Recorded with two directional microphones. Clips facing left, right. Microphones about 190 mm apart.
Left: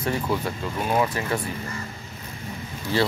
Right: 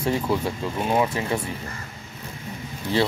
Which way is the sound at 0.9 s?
15° right (ahead or behind).